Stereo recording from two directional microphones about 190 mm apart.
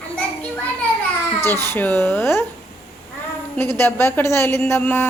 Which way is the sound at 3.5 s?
10° left (ahead or behind).